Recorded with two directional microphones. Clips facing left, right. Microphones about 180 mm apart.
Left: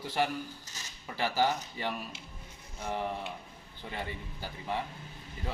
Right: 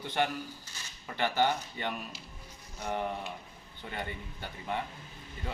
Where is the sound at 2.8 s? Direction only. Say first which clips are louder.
Even; centre (ahead or behind).